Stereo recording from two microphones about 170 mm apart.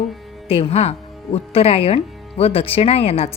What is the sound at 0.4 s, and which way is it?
A woman's voice, 35° left (ahead or behind).